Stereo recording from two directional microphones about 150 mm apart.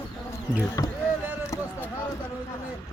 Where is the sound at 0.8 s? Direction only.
25° left (ahead or behind).